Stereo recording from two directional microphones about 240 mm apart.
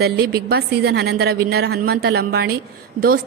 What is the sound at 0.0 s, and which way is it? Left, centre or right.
A woman's voice, right.